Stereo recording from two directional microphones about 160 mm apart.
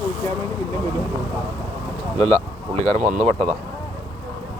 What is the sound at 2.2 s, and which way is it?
Speech, 40° right (ahead or behind).